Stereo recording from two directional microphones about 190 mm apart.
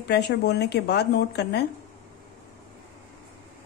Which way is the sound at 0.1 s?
60° left (ahead or behind).